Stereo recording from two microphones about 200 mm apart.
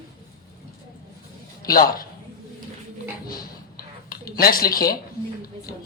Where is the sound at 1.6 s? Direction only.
45° left (ahead or behind).